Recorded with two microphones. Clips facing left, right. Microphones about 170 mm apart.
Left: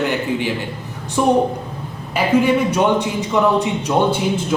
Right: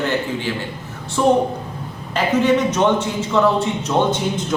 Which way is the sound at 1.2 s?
15° left (ahead or behind).